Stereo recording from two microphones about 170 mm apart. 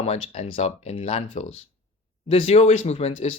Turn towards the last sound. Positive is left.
turn(degrees=40)  # may be behind; listen again after turning